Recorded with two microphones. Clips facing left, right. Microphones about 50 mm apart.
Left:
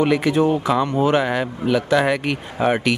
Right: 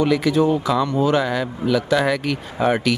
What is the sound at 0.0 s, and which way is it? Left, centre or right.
Speech, left.